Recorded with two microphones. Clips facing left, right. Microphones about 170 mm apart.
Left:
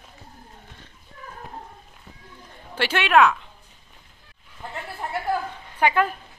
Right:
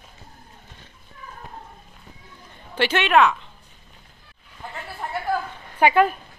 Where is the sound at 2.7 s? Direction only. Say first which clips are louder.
Even; 5° left (ahead or behind).